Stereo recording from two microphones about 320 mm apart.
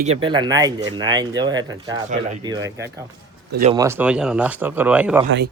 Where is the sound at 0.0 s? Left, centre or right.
Centre.